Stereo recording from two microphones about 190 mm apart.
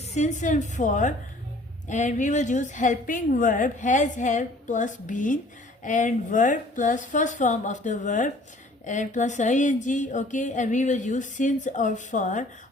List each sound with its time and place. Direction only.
0.1 s speech: 40° left (ahead or behind)